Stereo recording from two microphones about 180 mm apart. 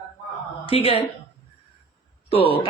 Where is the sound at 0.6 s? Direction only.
30° left (ahead or behind).